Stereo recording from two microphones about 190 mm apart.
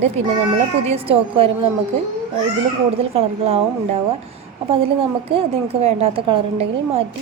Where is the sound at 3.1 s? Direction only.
30° right (ahead or behind).